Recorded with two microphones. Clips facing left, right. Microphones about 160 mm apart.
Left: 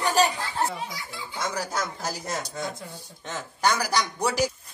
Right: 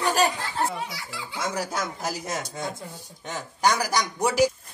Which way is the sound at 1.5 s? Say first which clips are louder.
Right 1 dB; 20° right (ahead or behind).